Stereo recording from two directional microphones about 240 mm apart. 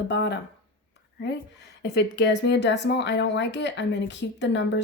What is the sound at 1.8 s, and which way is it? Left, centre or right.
Speech, left.